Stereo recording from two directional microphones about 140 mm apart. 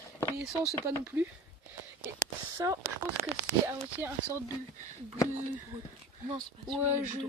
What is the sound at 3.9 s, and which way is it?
Speech, 15° right (ahead or behind).